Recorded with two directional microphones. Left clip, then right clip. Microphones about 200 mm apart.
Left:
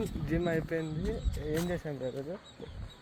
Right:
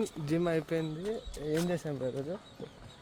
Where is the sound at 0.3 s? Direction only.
10° right (ahead or behind).